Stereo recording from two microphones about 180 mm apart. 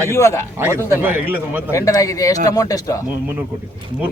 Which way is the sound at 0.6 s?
10° right (ahead or behind).